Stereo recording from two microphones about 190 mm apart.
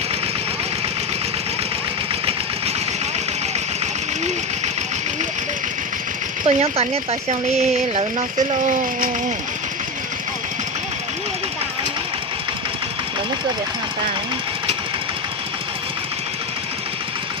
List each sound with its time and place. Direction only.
6.4 s speech: 30° right (ahead or behind)